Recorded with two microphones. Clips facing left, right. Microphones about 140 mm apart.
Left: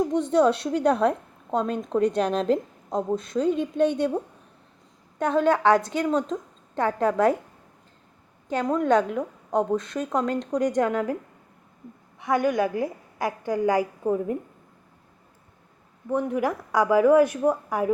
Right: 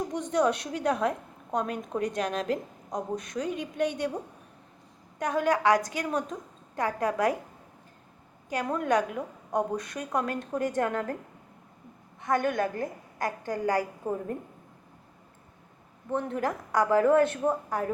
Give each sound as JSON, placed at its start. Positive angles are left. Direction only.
{"t": 0.1, "sound": "a woman's voice", "side_deg": 30}
{"t": 5.2, "sound": "a woman's voice", "side_deg": 25}
{"t": 8.4, "sound": "a woman's voice", "side_deg": 25}
{"t": 12.2, "sound": "a woman's voice", "side_deg": 15}
{"t": 16.0, "sound": "a woman's voice", "side_deg": 15}